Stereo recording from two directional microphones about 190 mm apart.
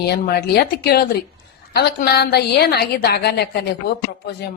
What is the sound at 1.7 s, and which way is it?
A woman's voice, 55° left (ahead or behind).